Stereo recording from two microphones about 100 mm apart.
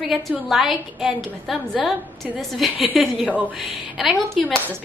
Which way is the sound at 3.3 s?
15° right (ahead or behind).